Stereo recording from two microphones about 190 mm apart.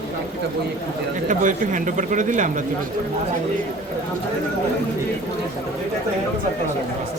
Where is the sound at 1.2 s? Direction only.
45° right (ahead or behind).